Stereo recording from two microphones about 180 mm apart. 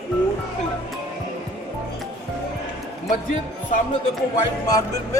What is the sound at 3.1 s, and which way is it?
Speech, 45° left (ahead or behind).